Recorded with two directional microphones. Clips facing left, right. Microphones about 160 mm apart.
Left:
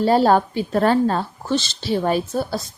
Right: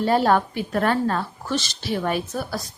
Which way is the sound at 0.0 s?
30° left (ahead or behind).